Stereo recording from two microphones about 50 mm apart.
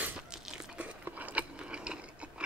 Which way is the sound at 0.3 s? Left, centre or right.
Centre.